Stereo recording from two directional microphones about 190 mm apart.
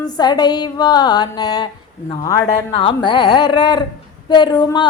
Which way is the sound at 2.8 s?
25° left (ahead or behind).